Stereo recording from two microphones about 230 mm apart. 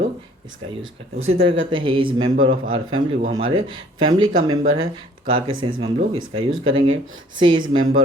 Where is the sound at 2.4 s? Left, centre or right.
Right.